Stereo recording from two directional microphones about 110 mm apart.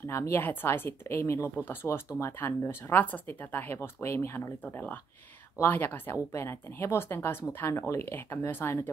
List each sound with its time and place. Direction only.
0.0 s speech: 25° left (ahead or behind)